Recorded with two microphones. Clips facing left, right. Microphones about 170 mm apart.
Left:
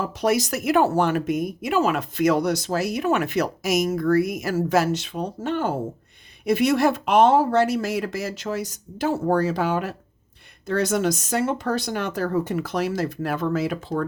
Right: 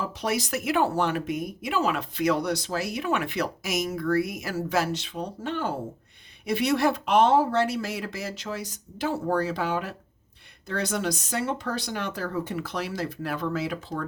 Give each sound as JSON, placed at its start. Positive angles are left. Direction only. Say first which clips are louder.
{"t": 0.2, "sound": "speech", "louder": "left 7 dB", "side_deg": 45}